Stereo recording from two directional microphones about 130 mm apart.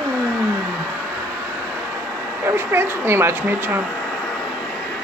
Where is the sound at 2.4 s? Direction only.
20° right (ahead or behind).